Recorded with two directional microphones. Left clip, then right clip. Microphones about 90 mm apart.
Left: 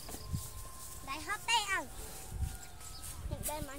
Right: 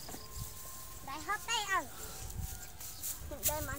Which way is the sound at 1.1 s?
20° right (ahead or behind).